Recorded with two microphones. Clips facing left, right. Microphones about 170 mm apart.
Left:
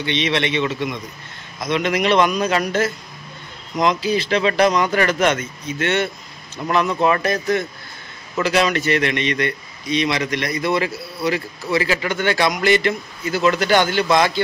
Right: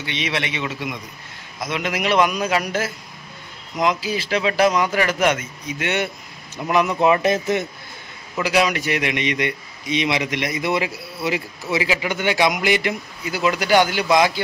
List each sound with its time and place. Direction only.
0.0 s a man's voice: 10° right (ahead or behind)